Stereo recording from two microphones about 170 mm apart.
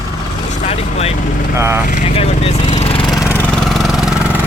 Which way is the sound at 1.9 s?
40° left (ahead or behind).